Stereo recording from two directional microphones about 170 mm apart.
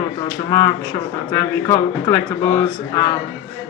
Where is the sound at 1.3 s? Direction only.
20° left (ahead or behind).